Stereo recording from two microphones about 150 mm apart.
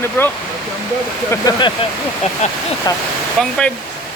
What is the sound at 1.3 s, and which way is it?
Speech, 25° left (ahead or behind).